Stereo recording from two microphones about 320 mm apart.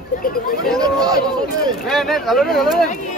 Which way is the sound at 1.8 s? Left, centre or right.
Centre.